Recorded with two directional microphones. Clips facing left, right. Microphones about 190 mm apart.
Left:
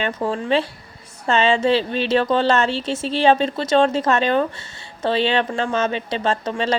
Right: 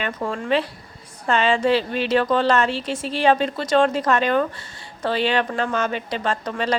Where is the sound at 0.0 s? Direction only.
30° left (ahead or behind).